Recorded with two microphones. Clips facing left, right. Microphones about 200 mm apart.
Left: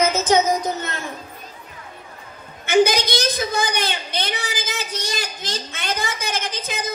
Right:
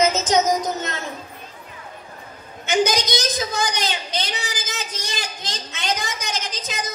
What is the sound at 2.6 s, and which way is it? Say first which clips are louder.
A woman's voice: left 4 dB; 55° left (ahead or behind).